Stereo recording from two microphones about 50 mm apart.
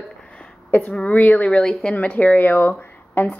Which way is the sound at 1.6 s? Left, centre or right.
Centre.